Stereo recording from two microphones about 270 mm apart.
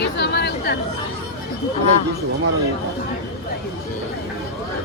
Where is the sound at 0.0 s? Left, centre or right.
Left.